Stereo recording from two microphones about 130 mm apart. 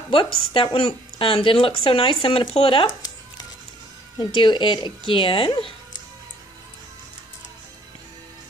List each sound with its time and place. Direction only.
0.1 s speech: 40° left (ahead or behind)
2.5 s a sound: 45° left (ahead or behind)
4.2 s speech: 40° left (ahead or behind)